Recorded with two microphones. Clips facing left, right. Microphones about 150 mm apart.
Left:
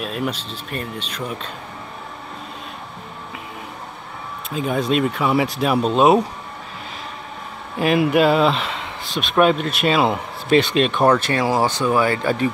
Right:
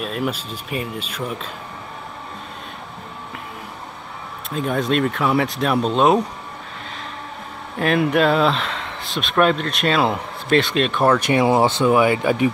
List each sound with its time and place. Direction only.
0.0 s speech: centre (ahead or behind)
4.5 s speech: centre (ahead or behind)
7.7 s speech: 5° left (ahead or behind)
11.1 s speech: 20° right (ahead or behind)